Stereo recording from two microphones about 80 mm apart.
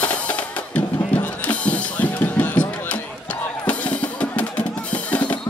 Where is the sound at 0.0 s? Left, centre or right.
Centre.